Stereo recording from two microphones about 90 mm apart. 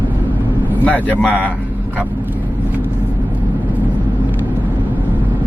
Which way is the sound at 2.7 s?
20° right (ahead or behind).